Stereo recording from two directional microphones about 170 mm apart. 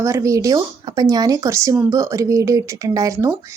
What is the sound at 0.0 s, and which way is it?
A woman's voice, 20° right (ahead or behind).